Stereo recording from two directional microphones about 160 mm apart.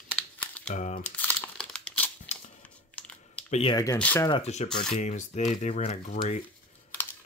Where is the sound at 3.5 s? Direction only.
35° left (ahead or behind).